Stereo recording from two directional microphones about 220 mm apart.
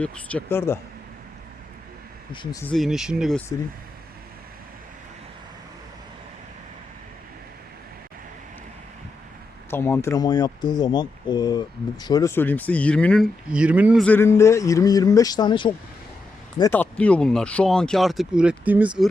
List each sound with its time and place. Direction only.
0.0 s speech: 5° left (ahead or behind)
2.3 s speech: 20° left (ahead or behind)
2.7 s speech: centre (ahead or behind)
9.6 s speech: 10° left (ahead or behind)
13.5 s speech: 5° right (ahead or behind)
14.0 s speech: 10° left (ahead or behind); by 19.0 s 5° right (ahead or behind)